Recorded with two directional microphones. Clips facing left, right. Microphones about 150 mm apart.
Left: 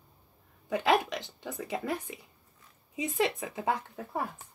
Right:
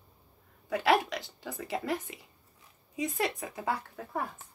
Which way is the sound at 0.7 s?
20° left (ahead or behind).